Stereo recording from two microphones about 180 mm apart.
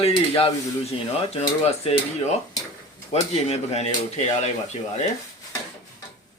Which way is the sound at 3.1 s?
35° left (ahead or behind).